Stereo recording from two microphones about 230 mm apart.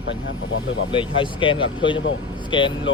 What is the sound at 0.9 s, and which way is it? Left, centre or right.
Speech, left.